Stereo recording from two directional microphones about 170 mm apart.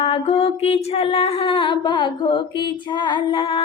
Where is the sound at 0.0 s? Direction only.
35° left (ahead or behind).